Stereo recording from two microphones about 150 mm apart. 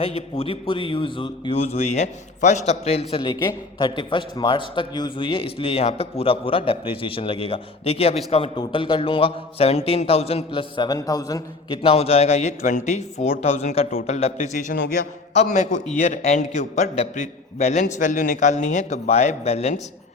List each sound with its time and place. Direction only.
0.0 s a man's voice: 40° left (ahead or behind); by 11.4 s 25° left (ahead or behind)
11.8 s a man's voice: 40° left (ahead or behind)